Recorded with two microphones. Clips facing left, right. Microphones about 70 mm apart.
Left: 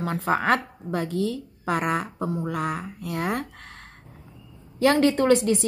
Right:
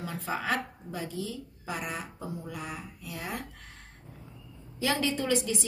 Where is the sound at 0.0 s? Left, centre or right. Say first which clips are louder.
Left 10 dB; left.